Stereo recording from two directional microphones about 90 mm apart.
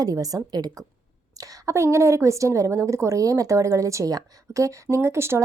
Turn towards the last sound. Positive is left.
turn(degrees=-30)  # may be behind; listen again after turning